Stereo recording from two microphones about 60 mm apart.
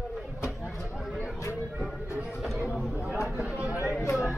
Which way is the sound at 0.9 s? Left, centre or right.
Centre.